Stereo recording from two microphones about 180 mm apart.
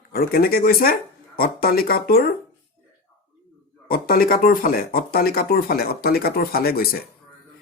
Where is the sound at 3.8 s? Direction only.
55° left (ahead or behind).